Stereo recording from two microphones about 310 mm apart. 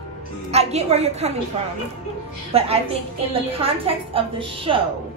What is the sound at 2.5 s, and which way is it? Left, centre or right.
A woman's voice, centre.